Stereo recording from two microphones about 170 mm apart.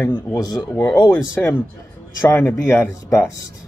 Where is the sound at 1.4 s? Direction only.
5° left (ahead or behind).